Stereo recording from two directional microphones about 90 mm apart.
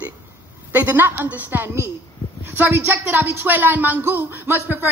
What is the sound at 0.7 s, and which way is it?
Speech, 20° right (ahead or behind).